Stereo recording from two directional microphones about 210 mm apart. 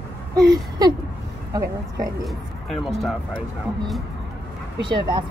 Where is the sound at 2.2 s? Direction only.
Centre (ahead or behind).